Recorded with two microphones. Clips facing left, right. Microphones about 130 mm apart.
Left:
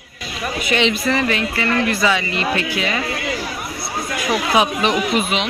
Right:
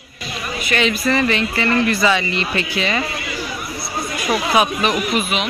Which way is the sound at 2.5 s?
10° left (ahead or behind).